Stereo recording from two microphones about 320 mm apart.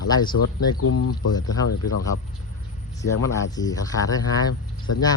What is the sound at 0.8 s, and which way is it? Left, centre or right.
Speech, left.